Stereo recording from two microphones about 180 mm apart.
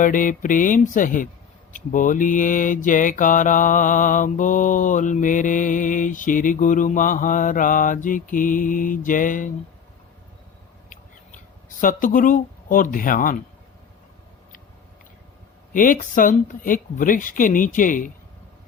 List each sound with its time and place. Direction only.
0.0 s mantra: 45° left (ahead or behind)
11.8 s mantra: 50° left (ahead or behind)
15.7 s mantra: 50° left (ahead or behind)